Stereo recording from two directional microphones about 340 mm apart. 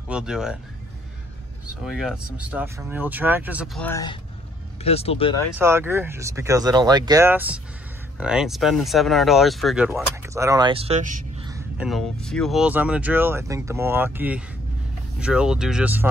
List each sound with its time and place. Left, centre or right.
0.1 s speech: centre
1.9 s speech: centre
5.6 s speech: centre
11.5 s speech: centre